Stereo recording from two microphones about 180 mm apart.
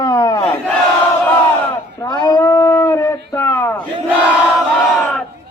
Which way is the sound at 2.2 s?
20° left (ahead or behind).